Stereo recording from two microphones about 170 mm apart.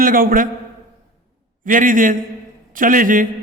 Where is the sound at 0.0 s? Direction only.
55° right (ahead or behind).